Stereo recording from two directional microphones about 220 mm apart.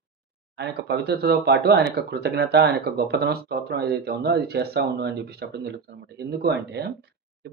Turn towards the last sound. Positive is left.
turn(degrees=-50)  # may be behind; listen again after turning